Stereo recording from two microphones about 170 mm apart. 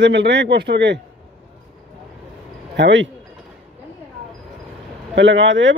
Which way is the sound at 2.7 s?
90° right.